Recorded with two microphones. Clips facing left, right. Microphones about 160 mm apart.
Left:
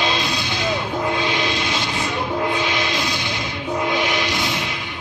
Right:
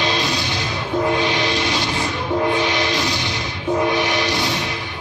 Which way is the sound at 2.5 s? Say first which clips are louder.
Right 3 dB; 15° left (ahead or behind).